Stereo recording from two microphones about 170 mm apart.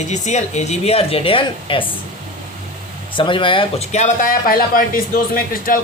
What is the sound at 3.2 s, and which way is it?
Speech, 30° left (ahead or behind).